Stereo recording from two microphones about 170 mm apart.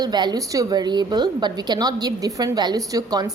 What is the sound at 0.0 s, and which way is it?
A woman's voice, 25° right (ahead or behind).